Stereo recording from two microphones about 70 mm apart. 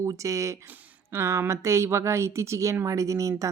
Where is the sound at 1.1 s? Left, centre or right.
Right.